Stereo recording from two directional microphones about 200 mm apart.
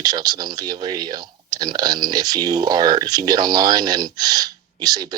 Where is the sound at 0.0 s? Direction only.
20° right (ahead or behind).